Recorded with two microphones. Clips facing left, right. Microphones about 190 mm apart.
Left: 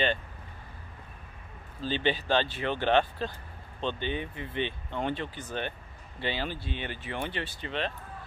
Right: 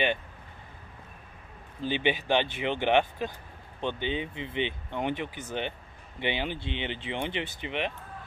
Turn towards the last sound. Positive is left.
turn(degrees=-15)  # may be behind; listen again after turning